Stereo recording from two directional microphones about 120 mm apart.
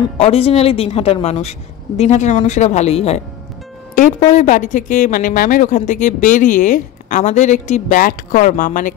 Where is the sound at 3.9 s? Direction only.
85° left.